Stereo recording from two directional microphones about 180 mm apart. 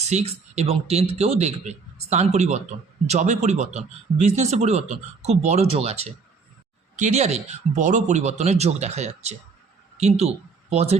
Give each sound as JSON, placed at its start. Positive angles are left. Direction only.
{"t": 0.0, "sound": "a man's voice", "side_deg": -40}